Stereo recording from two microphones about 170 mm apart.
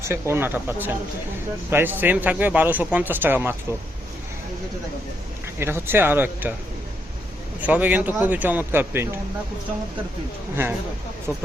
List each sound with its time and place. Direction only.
0.0 s speech: 15° right (ahead or behind)
5.5 s speech: 15° right (ahead or behind)
7.6 s speech: 10° right (ahead or behind)
10.5 s speech: 10° right (ahead or behind)